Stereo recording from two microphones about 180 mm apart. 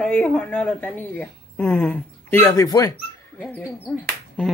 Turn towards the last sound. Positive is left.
turn(degrees=5)  # may be behind; listen again after turning